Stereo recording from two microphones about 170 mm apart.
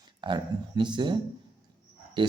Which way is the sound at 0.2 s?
30° right (ahead or behind).